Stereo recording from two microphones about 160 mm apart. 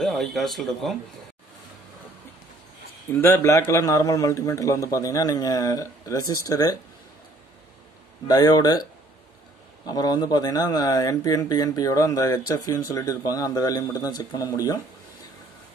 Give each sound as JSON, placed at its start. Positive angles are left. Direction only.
{"t": 0.0, "sound": "speech", "side_deg": 5}
{"t": 3.1, "sound": "speech", "side_deg": 15}
{"t": 8.3, "sound": "speech", "side_deg": 25}
{"t": 9.8, "sound": "speech", "side_deg": 25}